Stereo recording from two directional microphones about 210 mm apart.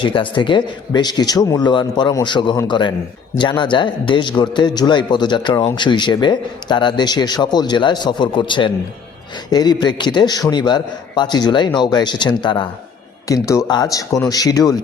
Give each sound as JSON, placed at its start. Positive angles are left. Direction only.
{"t": 0.0, "sound": "a man's voice", "side_deg": 25}